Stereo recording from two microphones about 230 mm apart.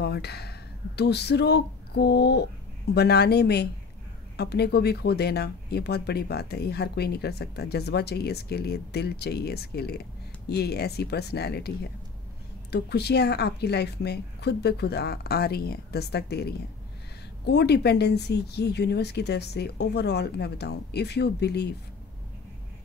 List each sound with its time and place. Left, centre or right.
0.0 s speech: left